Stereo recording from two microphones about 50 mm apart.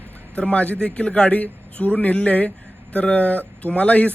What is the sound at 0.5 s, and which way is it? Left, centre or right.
A man's voice, left.